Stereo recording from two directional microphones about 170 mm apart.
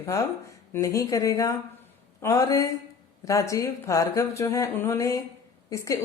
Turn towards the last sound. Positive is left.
turn(degrees=20)  # may be behind; listen again after turning